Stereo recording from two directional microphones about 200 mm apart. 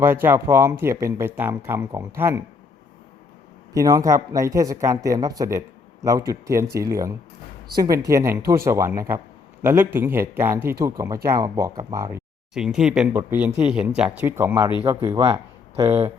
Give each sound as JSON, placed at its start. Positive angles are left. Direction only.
{"t": 0.0, "sound": "speech", "side_deg": -10}
{"t": 3.8, "sound": "speech", "side_deg": -15}
{"t": 12.5, "sound": "speech", "side_deg": -5}